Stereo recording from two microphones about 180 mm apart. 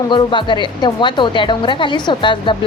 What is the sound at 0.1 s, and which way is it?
A woman's voice, 25° left (ahead or behind).